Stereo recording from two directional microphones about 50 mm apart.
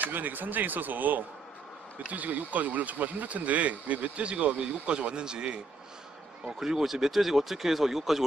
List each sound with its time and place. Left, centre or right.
0.0 s speech: right; by 5.6 s centre
6.6 s speech: centre